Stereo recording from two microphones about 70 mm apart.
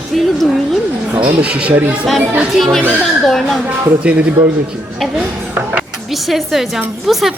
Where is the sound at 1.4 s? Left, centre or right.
Centre.